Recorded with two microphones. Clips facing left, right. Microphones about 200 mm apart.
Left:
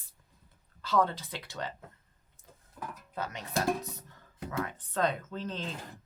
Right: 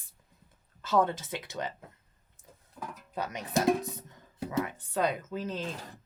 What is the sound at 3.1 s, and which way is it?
Speech, 15° right (ahead or behind).